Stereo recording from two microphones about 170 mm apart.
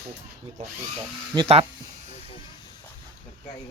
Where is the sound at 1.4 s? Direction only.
35° right (ahead or behind).